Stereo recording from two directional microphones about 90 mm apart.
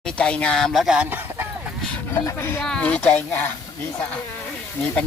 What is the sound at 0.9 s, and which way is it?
Speech, 20° right (ahead or behind).